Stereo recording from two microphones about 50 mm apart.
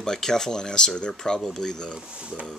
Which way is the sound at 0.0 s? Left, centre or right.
Centre.